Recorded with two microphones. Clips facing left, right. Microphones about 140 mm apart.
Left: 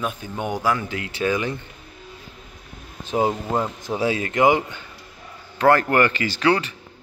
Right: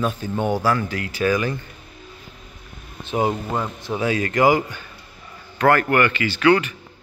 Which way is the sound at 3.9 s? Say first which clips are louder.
Right 1 dB; 25° left (ahead or behind).